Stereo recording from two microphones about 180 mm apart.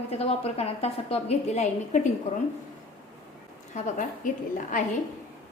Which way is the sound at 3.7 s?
40° left (ahead or behind).